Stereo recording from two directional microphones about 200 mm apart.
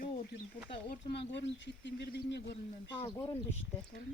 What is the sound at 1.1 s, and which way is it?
Speech, 60° left (ahead or behind).